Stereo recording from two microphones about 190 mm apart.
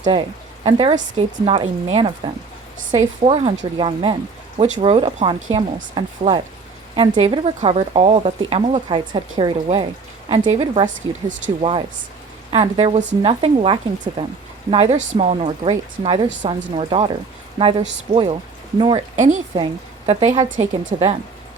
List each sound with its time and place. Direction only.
0.0 s speech: 25° right (ahead or behind); by 11.5 s 40° right (ahead or behind)
11.6 s speech: 30° right (ahead or behind)
19.1 s speech: 40° right (ahead or behind)
19.5 s a woman's voice: 25° right (ahead or behind)
20.6 s speech: 35° right (ahead or behind)